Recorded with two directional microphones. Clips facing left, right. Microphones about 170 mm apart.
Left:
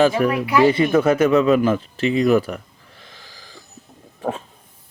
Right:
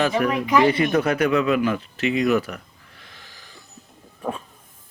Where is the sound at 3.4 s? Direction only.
90° left.